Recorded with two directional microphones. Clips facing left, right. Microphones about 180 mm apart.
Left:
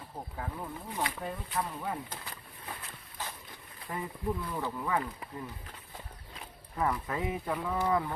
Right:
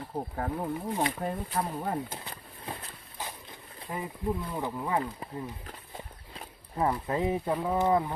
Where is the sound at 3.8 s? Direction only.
20° right (ahead or behind).